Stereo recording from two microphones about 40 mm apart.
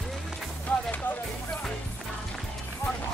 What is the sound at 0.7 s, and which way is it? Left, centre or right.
Music, left.